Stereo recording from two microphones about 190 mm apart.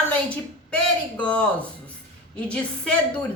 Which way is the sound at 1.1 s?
5° left (ahead or behind).